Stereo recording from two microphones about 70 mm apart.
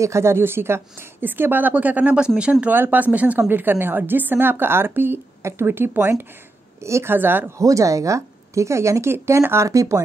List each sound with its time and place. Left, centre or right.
0.0 s a woman's voice: right; by 2.5 s centre
2.7 s a woman's voice: right
7.2 s a woman's voice: right
7.5 s a woman's voice: right